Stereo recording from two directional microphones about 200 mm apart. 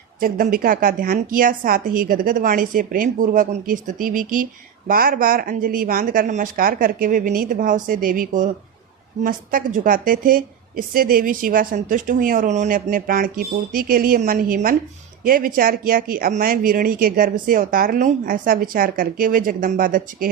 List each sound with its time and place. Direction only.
0.2 s a woman's voice: 45° right (ahead or behind)